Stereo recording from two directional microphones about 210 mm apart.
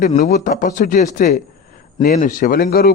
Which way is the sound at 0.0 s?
40° left (ahead or behind).